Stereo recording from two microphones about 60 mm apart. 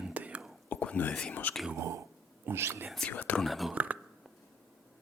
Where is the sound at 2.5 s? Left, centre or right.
Right.